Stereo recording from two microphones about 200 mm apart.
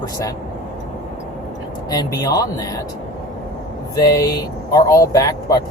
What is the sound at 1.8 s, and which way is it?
Speech, 20° left (ahead or behind).